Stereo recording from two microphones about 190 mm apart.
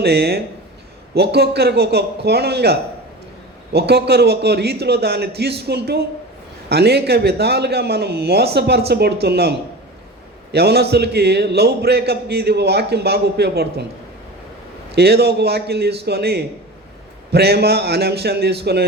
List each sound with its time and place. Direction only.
0.0 s a man's voice: 60° right (ahead or behind)
14.9 s a man's voice: 60° right (ahead or behind)